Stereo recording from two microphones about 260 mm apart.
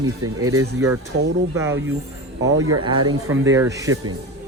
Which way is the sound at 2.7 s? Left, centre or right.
Centre.